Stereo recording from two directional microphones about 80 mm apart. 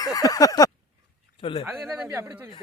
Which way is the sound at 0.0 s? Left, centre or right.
Left.